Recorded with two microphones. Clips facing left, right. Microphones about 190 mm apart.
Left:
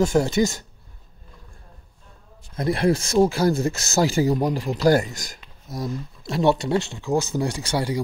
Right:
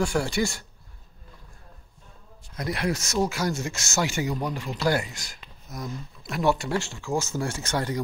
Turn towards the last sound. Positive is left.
turn(degrees=10)  # may be behind; listen again after turning